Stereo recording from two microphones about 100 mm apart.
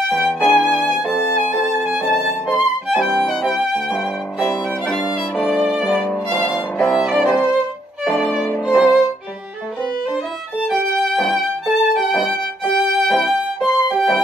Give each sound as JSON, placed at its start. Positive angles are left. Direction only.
{"t": 0.1, "sound": "music", "side_deg": 0}
{"t": 0.5, "sound": "music", "side_deg": 15}
{"t": 1.0, "sound": "violin", "side_deg": 20}
{"t": 1.8, "sound": "violin", "side_deg": -10}
{"t": 2.1, "sound": "music", "side_deg": 0}
{"t": 5.7, "sound": "violin", "side_deg": 0}
{"t": 7.2, "sound": "violin", "side_deg": 15}
{"t": 8.0, "sound": "violin", "side_deg": 5}
{"t": 8.5, "sound": "violin", "side_deg": 15}
{"t": 10.7, "sound": "violin", "side_deg": 0}
{"t": 13.6, "sound": "music", "side_deg": -5}